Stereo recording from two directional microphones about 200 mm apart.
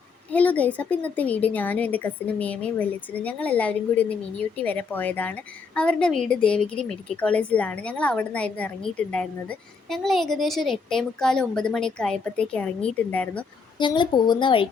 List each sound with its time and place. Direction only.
0.3 s a woman's voice: 5° left (ahead or behind)
13.7 s a woman's voice: 25° left (ahead or behind)